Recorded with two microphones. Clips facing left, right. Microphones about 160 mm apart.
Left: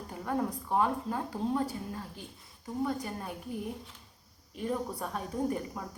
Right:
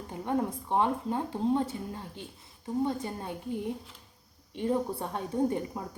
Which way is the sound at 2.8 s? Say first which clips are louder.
Left 1 dB; 25° right (ahead or behind).